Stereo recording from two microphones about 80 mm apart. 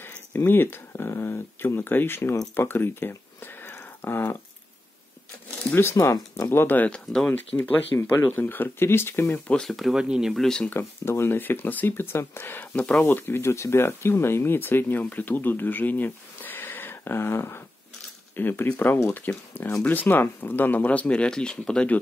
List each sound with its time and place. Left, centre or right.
0.0 s speech: left
5.8 s speech: left
6.9 s speech: centre
7.2 s speech: left
9.5 s speech: centre
10.3 s speech: centre
10.7 s speech: left; by 13.0 s centre
13.0 s speech: left